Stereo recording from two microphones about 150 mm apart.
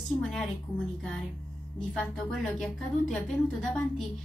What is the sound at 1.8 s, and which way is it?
Speech, 5° left (ahead or behind).